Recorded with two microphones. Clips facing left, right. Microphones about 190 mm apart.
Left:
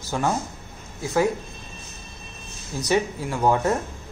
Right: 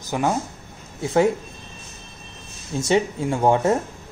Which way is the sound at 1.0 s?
25° right (ahead or behind).